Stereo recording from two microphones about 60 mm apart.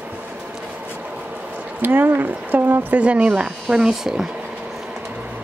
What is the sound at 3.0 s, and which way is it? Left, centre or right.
Speech, centre.